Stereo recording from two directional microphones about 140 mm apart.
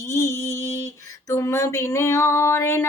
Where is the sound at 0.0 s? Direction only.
20° left (ahead or behind).